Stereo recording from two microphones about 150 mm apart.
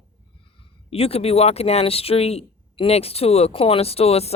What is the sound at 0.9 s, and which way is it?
Speech, 40° left (ahead or behind).